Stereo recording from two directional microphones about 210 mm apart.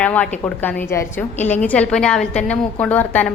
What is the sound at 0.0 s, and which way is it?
A woman's voice, 5° left (ahead or behind).